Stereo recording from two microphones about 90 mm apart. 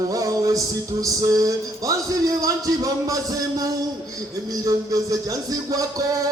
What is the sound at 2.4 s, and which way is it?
Speech, 40° right (ahead or behind).